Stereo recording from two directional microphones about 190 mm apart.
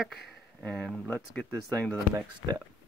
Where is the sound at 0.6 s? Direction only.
5° left (ahead or behind).